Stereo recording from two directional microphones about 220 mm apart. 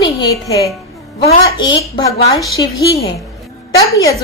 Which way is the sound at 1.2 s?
25° left (ahead or behind).